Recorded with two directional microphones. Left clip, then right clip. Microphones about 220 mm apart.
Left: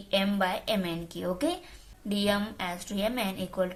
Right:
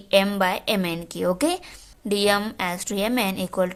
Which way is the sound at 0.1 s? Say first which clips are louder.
Right 8 dB; 40° right (ahead or behind).